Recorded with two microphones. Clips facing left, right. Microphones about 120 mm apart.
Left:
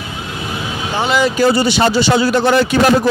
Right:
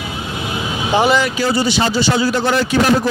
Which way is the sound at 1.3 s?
55° left (ahead or behind).